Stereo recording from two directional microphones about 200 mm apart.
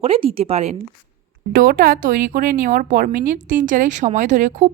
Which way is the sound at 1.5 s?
45° right (ahead or behind).